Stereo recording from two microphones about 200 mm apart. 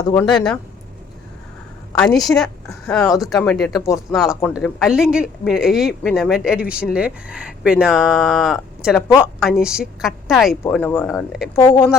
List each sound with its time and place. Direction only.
0.0 s speech: 15° left (ahead or behind)
0.3 s speech: 5° left (ahead or behind)
2.1 s speech: centre (ahead or behind)
11.5 s speech: 10° left (ahead or behind)